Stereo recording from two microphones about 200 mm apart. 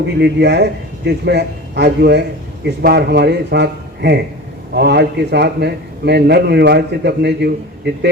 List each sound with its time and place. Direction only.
0.2 s a man's voice: 55° right (ahead or behind)